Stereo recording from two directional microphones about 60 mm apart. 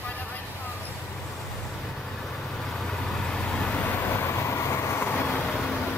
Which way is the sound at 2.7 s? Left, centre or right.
Centre.